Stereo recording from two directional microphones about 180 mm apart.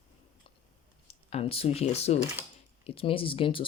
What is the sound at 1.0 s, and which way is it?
Speech, 35° left (ahead or behind).